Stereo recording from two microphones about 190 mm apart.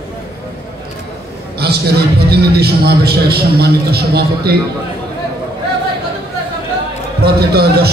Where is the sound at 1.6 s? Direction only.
60° right (ahead or behind).